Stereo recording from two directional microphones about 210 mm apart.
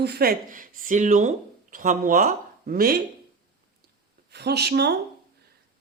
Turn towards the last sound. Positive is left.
turn(degrees=-50)  # may be behind; listen again after turning